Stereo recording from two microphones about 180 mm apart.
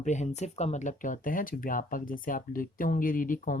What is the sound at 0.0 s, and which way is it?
Speech, 40° left (ahead or behind).